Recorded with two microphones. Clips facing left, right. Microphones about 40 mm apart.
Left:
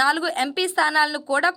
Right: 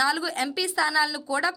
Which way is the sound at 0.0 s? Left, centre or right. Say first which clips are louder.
Left 4 dB; left.